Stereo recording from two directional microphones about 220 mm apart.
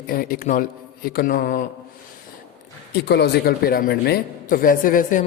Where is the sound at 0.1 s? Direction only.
40° left (ahead or behind).